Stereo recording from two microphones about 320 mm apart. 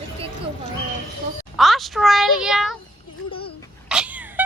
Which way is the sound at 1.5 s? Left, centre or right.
Centre.